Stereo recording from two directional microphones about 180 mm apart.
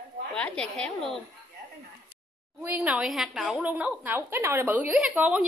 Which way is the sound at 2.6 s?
10° right (ahead or behind).